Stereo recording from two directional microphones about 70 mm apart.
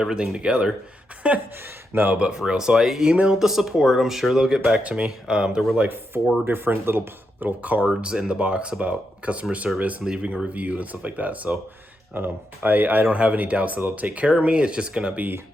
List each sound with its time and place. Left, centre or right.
0.0 s speech: centre; by 2.1 s right
2.1 s speech: centre
6.4 s speech: right
7.6 s speech: right
7.9 s speech: centre